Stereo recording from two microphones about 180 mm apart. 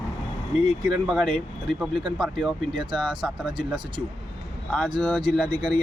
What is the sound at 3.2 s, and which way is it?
Speech, 5° right (ahead or behind).